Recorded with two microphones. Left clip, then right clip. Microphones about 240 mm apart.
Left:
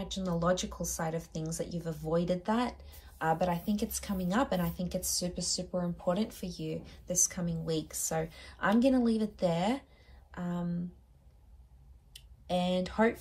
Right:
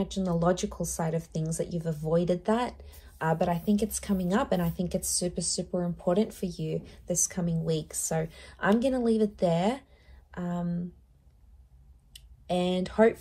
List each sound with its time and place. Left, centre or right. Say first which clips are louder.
0.0 s a woman's voice: right 5 dB; right
12.1 s speech: right 3 dB; right